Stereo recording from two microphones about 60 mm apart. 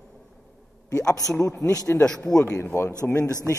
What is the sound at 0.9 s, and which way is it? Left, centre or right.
A man's voice, left.